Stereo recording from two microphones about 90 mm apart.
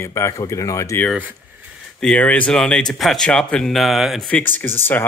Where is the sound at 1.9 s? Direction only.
10° left (ahead or behind).